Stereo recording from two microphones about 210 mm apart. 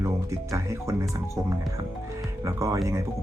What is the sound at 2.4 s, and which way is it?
Speech, 15° right (ahead or behind).